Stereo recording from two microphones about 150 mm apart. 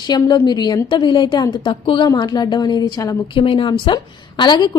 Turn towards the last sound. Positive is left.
turn(degrees=30)  # may be behind; listen again after turning